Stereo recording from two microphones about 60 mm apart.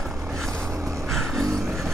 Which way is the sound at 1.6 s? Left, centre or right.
Centre.